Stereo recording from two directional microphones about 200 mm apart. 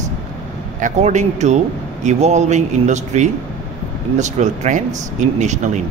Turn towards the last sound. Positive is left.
turn(degrees=-35)  # may be behind; listen again after turning